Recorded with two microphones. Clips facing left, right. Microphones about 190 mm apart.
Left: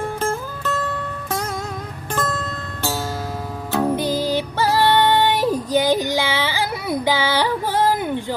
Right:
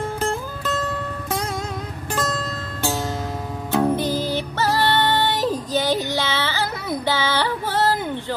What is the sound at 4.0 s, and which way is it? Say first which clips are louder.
Music: left 2 dB; 10° left (ahead or behind).